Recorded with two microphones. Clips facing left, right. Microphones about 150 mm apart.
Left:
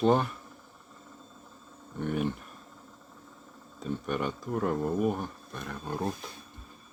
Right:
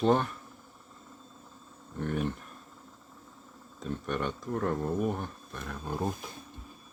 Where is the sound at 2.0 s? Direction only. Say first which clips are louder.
Left 1 dB; centre (ahead or behind).